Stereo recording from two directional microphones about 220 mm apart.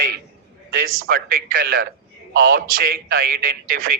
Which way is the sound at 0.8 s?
65° right (ahead or behind).